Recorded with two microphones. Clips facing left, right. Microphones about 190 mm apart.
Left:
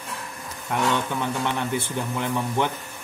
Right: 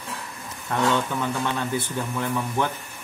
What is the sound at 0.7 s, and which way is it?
Speech, 10° left (ahead or behind).